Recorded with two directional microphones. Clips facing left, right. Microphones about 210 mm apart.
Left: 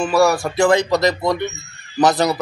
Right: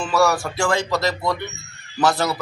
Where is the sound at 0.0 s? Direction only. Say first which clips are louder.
Left 4 dB; 15° left (ahead or behind).